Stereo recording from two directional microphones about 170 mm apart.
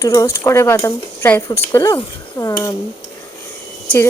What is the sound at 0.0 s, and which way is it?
A woman's voice, 20° left (ahead or behind).